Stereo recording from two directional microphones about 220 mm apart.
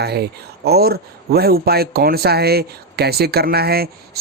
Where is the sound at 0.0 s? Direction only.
45° right (ahead or behind).